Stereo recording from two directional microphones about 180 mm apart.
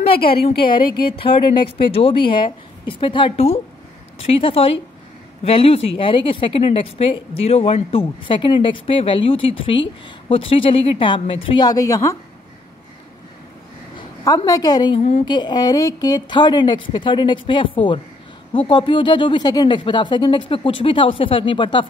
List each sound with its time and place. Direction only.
0.4 s a woman's voice: 30° left (ahead or behind)
13.9 s a woman's voice: 20° left (ahead or behind)
15.0 s speech: 40° left (ahead or behind)
15.2 s a woman's voice: 25° left (ahead or behind)